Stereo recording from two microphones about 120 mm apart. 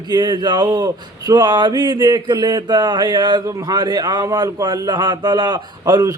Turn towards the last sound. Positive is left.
turn(degrees=-30)  # may be behind; listen again after turning